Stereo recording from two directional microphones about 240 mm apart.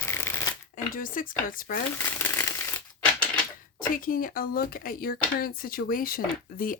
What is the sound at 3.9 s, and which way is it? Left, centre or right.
Speech, left.